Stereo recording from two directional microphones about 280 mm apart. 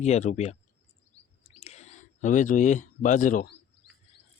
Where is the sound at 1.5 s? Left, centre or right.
Left.